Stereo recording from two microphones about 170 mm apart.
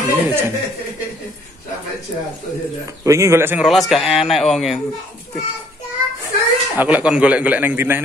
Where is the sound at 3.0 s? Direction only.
15° right (ahead or behind).